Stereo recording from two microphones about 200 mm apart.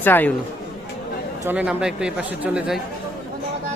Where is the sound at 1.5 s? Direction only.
5° right (ahead or behind).